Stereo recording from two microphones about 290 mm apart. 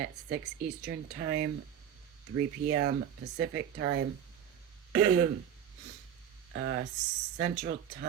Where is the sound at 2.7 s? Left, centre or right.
Right.